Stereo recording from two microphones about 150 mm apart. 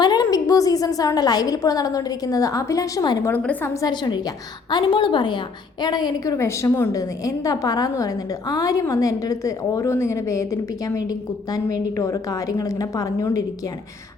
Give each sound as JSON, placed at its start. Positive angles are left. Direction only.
{"t": 0.0, "sound": "a woman's voice", "side_deg": 25}
{"t": 3.3, "sound": "a woman's voice", "side_deg": 10}
{"t": 3.8, "sound": "a woman's voice", "side_deg": 30}